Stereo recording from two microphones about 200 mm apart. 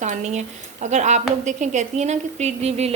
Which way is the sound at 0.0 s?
35° right (ahead or behind).